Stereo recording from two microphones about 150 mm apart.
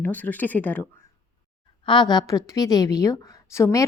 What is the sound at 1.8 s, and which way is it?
A woman's voice, 30° left (ahead or behind).